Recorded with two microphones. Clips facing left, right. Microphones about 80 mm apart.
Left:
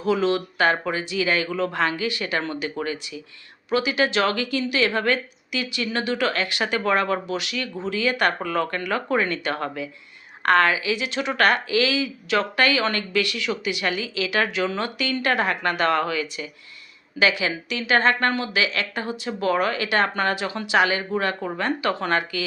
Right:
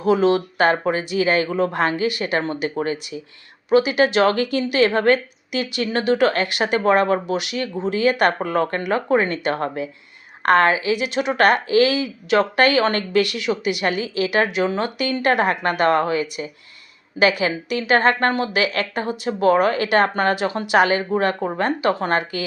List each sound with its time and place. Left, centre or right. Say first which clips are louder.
0.0 s a woman's voice: right 5 dB; right
10.9 s speech: right 4 dB; right
13.4 s a woman's voice: right 4 dB; right
21.5 s speech: right 4 dB; right